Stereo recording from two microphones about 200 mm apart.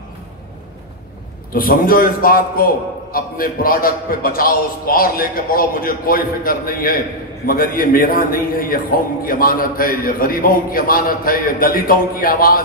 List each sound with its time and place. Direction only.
1.5 s a man's voice: 45° left (ahead or behind)